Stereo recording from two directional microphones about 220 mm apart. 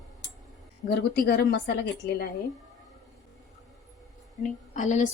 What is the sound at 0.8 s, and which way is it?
Speech, 45° left (ahead or behind).